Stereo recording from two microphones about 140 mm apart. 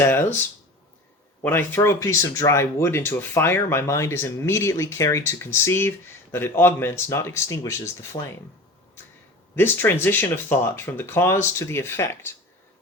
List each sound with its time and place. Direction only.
0.0 s speech: 15° left (ahead or behind)
1.5 s speech: 15° left (ahead or behind)
9.6 s speech: 15° left (ahead or behind)